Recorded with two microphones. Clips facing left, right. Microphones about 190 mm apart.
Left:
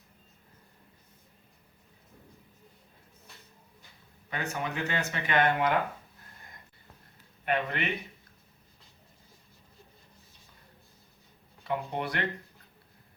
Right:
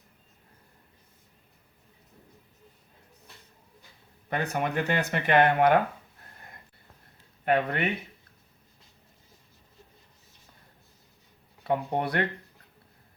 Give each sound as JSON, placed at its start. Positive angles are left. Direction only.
{"t": 4.3, "sound": "speech", "side_deg": -55}
{"t": 7.4, "sound": "speech", "side_deg": -45}
{"t": 11.6, "sound": "speech", "side_deg": -50}